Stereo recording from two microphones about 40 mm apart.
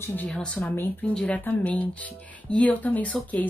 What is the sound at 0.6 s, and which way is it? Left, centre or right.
Speech, left.